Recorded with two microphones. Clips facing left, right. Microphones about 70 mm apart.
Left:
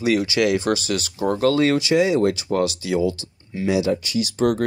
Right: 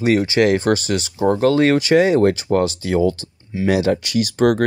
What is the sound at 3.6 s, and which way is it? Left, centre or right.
Speech, right.